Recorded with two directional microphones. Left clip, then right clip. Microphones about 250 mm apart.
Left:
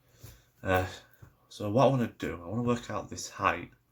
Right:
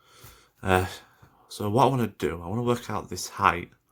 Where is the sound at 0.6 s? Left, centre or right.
Right.